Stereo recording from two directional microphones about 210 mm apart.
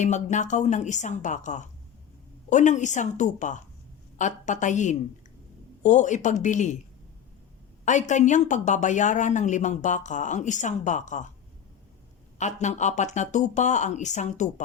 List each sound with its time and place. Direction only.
0.0 s speech: 35° left (ahead or behind)
7.9 s speech: 35° left (ahead or behind)
12.4 s speech: 35° left (ahead or behind)